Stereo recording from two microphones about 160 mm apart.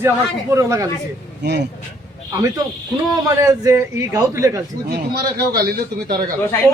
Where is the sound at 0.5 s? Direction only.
20° right (ahead or behind).